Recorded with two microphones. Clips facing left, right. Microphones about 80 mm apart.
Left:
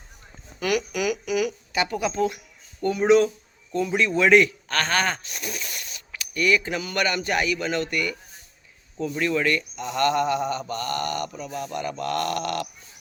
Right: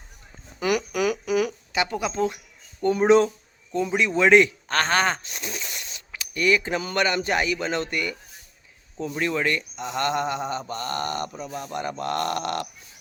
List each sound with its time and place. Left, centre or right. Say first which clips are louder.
0.6 s speech: right 1 dB; right
0.9 s a sound: right 2 dB; right
1.7 s speech: even; right
3.7 s speech: even; centre